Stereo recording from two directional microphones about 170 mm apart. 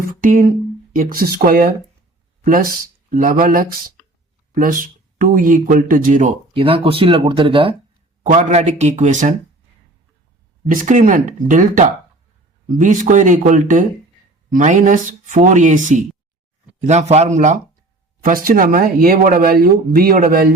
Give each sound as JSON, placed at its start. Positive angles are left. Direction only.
{"t": 0.0, "sound": "speech", "side_deg": -55}
{"t": 6.5, "sound": "speech", "side_deg": -30}
{"t": 10.7, "sound": "speech", "side_deg": -50}
{"t": 16.8, "sound": "speech", "side_deg": -40}
{"t": 18.2, "sound": "speech", "side_deg": -55}